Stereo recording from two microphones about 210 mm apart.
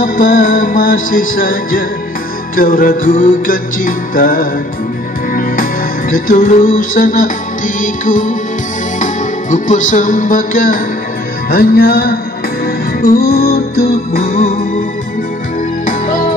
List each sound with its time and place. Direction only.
0.0 s music: 40° left (ahead or behind)
15.8 s music: 40° left (ahead or behind)